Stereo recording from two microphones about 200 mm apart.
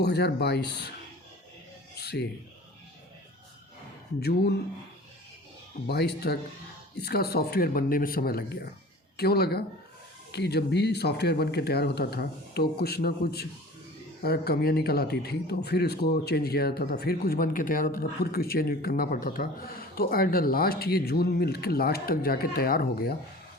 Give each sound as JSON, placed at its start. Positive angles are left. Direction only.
{"t": 0.0, "sound": "speech", "side_deg": 55}
{"t": 2.0, "sound": "a sound", "side_deg": 55}
{"t": 4.2, "sound": "speech", "side_deg": 55}
{"t": 5.9, "sound": "speech", "side_deg": 55}